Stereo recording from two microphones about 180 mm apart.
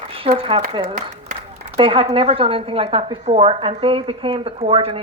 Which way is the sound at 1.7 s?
30° right (ahead or behind).